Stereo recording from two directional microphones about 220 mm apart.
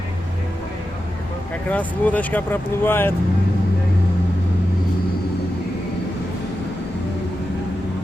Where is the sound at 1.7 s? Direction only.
5° left (ahead or behind).